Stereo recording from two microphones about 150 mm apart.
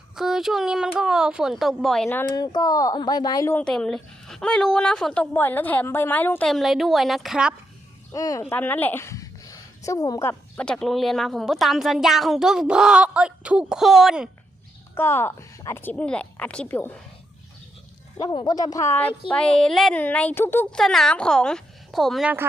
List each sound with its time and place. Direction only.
0.2 s a woman's voice: 5° right (ahead or behind)
2.0 s a woman's voice: 15° left (ahead or behind)
2.4 s speech: 25° left (ahead or behind)
3.5 s a woman's voice: 5° left (ahead or behind)
6.5 s a woman's voice: centre (ahead or behind)
8.1 s a woman's voice: 25° left (ahead or behind); by 14.3 s 5° right (ahead or behind)
14.9 s a woman's voice: 15° left (ahead or behind)
18.2 s a woman's voice: 30° left (ahead or behind); by 22.3 s centre (ahead or behind)